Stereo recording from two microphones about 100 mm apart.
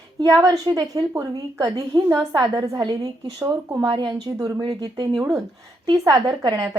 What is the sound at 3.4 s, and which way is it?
Speech, 25° right (ahead or behind).